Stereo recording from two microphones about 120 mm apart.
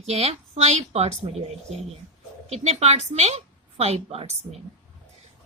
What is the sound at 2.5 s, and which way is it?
Speech, 60° right (ahead or behind).